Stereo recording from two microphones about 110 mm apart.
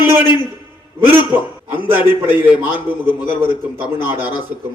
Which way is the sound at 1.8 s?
20° right (ahead or behind).